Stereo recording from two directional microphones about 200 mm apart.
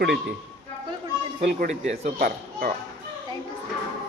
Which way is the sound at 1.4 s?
35° right (ahead or behind).